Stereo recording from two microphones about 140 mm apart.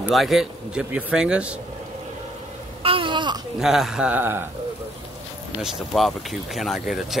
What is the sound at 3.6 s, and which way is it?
Speech, 5° right (ahead or behind).